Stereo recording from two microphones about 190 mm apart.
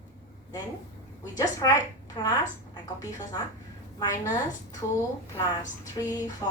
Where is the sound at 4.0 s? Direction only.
20° left (ahead or behind).